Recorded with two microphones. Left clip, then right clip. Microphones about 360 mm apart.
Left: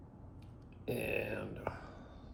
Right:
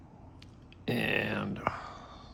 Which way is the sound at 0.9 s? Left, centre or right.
Right.